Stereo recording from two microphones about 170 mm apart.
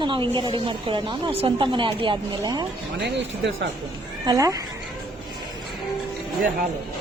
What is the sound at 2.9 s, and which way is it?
Speech, 90° right.